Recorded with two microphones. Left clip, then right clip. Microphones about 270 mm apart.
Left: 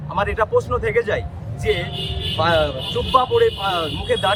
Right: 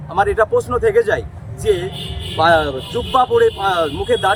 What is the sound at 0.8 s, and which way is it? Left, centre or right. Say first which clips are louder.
Speech: right 5 dB; centre.